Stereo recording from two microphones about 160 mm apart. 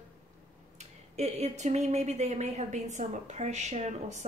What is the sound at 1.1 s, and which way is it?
Speech, 45° right (ahead or behind).